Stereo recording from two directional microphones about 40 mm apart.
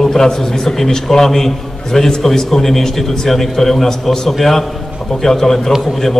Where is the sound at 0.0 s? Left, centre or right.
Centre.